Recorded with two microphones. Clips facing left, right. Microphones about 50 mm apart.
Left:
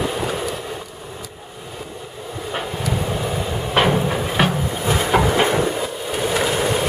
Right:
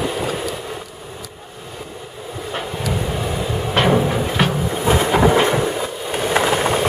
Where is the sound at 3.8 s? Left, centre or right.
Centre.